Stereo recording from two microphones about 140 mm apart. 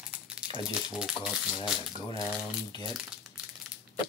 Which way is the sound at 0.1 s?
10° right (ahead or behind).